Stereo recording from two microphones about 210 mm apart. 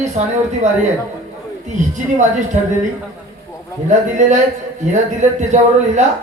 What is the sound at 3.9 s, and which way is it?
Speech, 35° right (ahead or behind).